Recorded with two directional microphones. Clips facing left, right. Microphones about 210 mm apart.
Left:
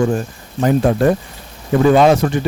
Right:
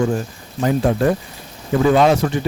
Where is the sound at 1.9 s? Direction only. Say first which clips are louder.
Left 3 dB; 55° left (ahead or behind).